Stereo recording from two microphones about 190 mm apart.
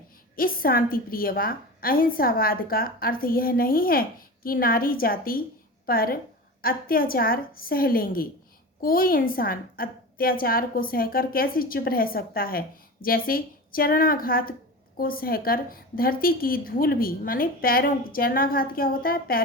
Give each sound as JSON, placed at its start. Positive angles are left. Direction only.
{"t": 0.3, "sound": "a woman's voice", "side_deg": 50}